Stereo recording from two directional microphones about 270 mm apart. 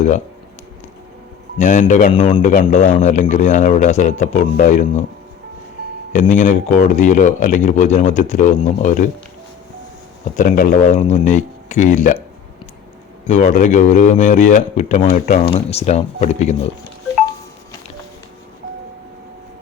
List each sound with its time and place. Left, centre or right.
1.5 s a man's voice: left
6.1 s a man's voice: left
10.3 s a man's voice: left
13.2 s a man's voice: left